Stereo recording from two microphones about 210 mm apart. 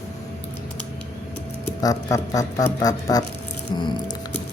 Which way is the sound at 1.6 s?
15° left (ahead or behind).